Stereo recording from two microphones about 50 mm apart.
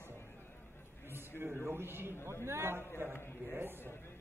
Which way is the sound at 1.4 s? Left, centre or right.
Right.